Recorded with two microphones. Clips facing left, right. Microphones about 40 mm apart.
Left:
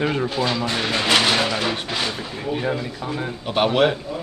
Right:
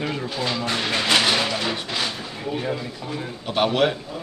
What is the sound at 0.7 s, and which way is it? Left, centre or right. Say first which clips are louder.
Speech: even; centre.